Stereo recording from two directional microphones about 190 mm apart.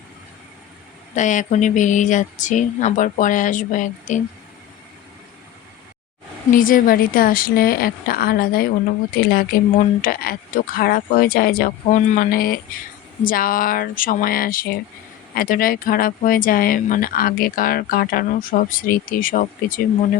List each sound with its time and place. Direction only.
1.1 s speech: 40° left (ahead or behind)
6.5 s speech: 45° left (ahead or behind)